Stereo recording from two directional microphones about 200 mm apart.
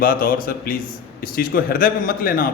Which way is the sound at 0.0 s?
45° left (ahead or behind).